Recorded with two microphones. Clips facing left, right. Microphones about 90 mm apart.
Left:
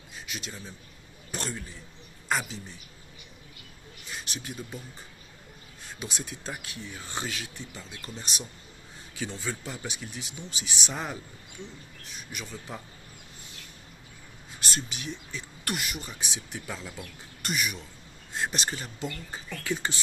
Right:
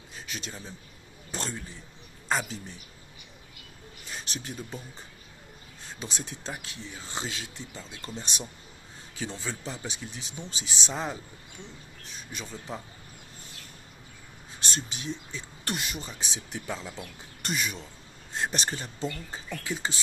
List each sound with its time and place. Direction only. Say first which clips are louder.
0.3 s speech: even; 35° right (ahead or behind)
1.3 s a sound: even; 25° right (ahead or behind)
2.3 s speech: right 1 dB; 30° right (ahead or behind)
4.1 s speech: even; 35° right (ahead or behind)
5.8 s speech: even; 30° right (ahead or behind)
14.7 s speech: right 1 dB; 25° right (ahead or behind)